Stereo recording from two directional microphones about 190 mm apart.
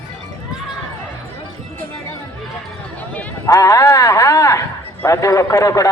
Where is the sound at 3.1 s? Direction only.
15° left (ahead or behind).